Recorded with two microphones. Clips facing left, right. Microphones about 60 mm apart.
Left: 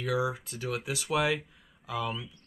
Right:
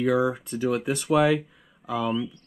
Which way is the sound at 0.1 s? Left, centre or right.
Right.